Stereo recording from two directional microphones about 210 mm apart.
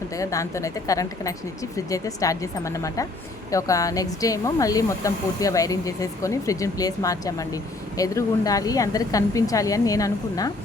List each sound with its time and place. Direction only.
0.2 s speech: 15° left (ahead or behind)